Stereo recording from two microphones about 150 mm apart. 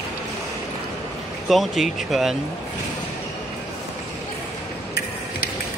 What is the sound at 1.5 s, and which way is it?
Speech, centre (ahead or behind).